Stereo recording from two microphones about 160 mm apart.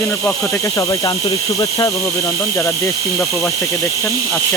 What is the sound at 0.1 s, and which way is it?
Speech, 20° left (ahead or behind).